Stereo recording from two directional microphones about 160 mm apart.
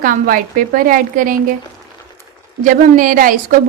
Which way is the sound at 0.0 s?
60° right (ahead or behind).